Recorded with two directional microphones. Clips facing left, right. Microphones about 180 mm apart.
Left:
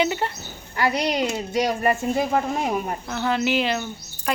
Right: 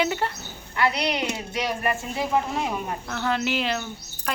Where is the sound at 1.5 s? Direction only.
40° left (ahead or behind).